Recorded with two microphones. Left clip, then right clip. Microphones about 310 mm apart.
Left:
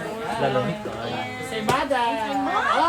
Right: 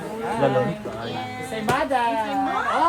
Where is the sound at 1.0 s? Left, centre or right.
Centre.